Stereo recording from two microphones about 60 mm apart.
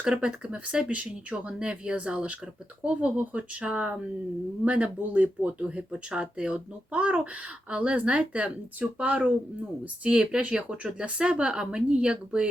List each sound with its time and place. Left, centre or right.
0.0 s a woman's voice: centre